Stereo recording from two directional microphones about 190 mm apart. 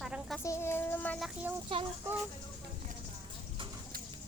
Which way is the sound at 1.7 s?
30° right (ahead or behind).